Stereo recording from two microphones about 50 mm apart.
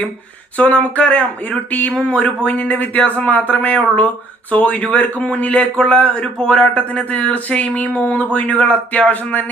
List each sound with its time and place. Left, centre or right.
0.5 s a man's voice: left